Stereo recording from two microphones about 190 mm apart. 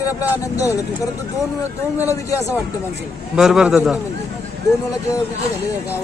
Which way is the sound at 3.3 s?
5° right (ahead or behind).